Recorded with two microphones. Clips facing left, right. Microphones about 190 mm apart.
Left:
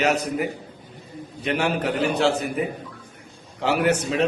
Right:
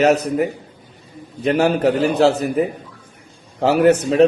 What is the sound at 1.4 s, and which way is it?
A man's voice, 35° right (ahead or behind).